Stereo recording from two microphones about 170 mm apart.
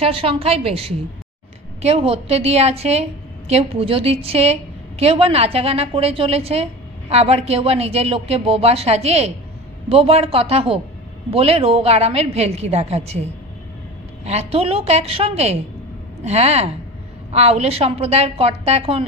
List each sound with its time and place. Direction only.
0.0 s a woman's voice: 35° right (ahead or behind)
14.2 s a woman's voice: 35° right (ahead or behind)